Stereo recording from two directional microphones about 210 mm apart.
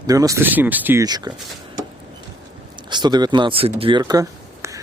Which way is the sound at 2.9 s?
20° right (ahead or behind).